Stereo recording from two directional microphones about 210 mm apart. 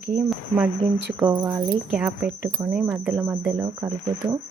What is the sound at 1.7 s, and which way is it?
Speech, centre (ahead or behind).